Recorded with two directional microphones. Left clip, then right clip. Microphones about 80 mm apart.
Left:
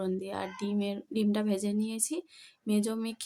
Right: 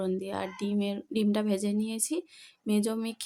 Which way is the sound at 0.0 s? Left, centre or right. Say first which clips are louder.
Right 2 dB; right.